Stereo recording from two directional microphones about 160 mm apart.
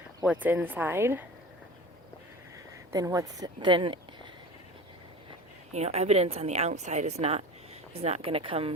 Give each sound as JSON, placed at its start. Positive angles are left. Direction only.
{"t": 0.3, "sound": "speech", "side_deg": -10}
{"t": 2.9, "sound": "speech", "side_deg": -20}
{"t": 5.7, "sound": "a woman's voice", "side_deg": -40}